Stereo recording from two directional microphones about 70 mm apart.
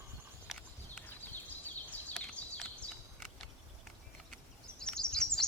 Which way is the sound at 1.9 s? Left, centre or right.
Left.